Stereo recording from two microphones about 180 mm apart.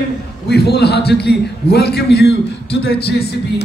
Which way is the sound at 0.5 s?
65° left (ahead or behind).